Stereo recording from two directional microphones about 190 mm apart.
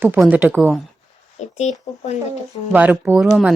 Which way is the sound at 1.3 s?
35° left (ahead or behind).